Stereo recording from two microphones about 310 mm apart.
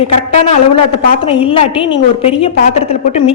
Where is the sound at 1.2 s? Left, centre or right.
Centre.